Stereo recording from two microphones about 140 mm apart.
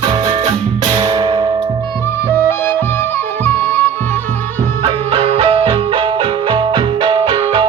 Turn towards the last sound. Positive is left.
turn(degrees=-40)  # may be behind; listen again after turning